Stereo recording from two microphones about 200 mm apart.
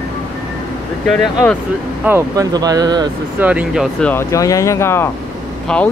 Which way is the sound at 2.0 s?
15° right (ahead or behind).